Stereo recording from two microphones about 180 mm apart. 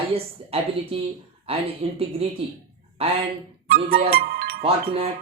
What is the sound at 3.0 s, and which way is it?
Speech, 35° right (ahead or behind).